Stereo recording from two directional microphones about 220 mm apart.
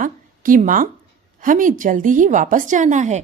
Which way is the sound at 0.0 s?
35° right (ahead or behind).